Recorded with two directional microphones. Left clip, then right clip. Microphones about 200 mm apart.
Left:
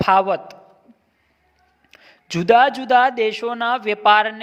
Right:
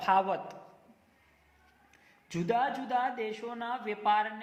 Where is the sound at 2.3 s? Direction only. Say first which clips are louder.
Left 16 dB; 55° left (ahead or behind).